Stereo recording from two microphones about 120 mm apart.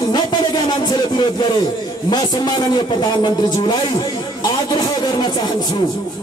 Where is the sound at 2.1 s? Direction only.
35° left (ahead or behind).